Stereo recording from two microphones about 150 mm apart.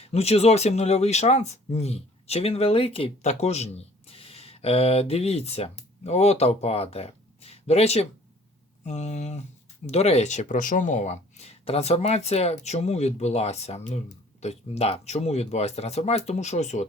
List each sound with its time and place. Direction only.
0.0 s speech: 45° left (ahead or behind)